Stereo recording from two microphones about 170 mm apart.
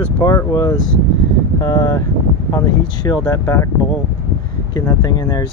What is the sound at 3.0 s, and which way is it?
Speech, 25° left (ahead or behind).